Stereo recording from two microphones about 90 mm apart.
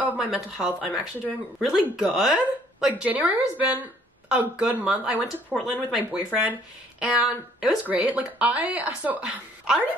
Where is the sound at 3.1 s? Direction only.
15° right (ahead or behind).